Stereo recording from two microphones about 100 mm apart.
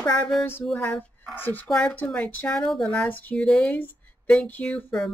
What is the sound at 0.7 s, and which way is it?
Speech, 15° left (ahead or behind).